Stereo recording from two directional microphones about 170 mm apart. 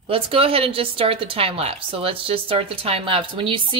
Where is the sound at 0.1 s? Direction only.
35° right (ahead or behind).